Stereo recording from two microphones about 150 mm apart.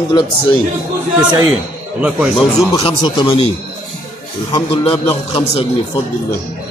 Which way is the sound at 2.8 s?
35° left (ahead or behind).